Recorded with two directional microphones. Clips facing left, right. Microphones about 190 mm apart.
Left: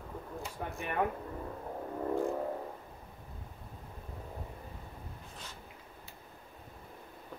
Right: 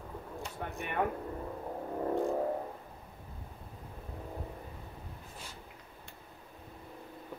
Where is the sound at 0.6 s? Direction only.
5° left (ahead or behind).